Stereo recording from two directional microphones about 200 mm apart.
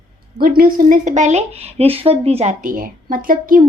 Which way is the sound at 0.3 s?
45° right (ahead or behind).